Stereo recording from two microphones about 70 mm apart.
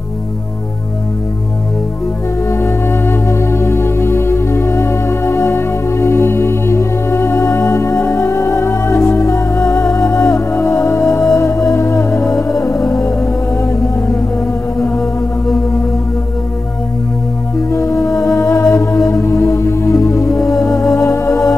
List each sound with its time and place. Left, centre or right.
2.5 s music: left
17.6 s music: left